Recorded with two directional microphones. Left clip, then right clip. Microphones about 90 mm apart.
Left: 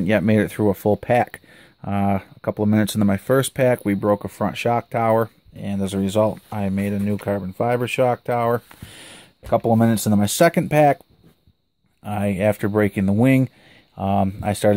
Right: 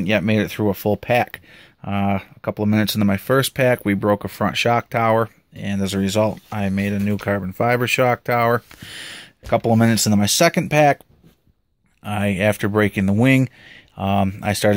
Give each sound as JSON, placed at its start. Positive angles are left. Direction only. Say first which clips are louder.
{"t": 0.0, "sound": "speech", "louder": "left 1 dB", "side_deg": 60}
{"t": 7.2, "sound": "speech", "louder": "right 3 dB", "side_deg": 10}
{"t": 8.8, "sound": "speech", "louder": "right 7 dB", "side_deg": 20}
{"t": 10.1, "sound": "speech", "louder": "left 1 dB", "side_deg": 45}
{"t": 12.0, "sound": "speech", "louder": "right 1 dB", "side_deg": 25}